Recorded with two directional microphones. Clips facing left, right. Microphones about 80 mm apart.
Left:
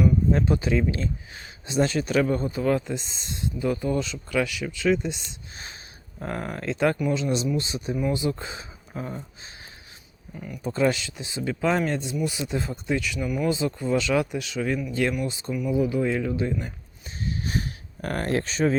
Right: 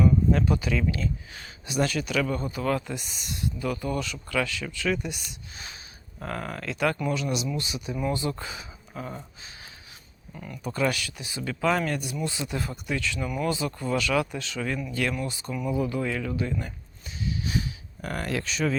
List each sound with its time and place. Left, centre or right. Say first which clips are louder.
0.3 s speech: left 2 dB; left
10.3 s speech: left 3 dB; centre
10.6 s speech: left 4 dB; left
13.1 s speech: left 3 dB; centre
13.5 s speech: left 3 dB; left
17.2 s a sound: even; left